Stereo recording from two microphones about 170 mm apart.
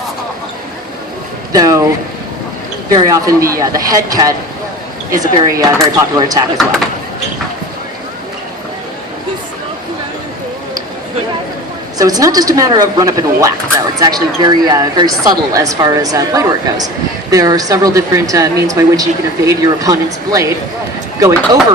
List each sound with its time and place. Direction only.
1.5 s speech: 20° right (ahead or behind)
2.9 s speech: 20° right (ahead or behind)
6.6 s speech: centre (ahead or behind)
11.9 s speech: 20° right (ahead or behind)